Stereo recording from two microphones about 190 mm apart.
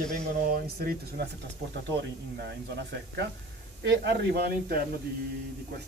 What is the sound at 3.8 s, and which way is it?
Speech, 65° right (ahead or behind).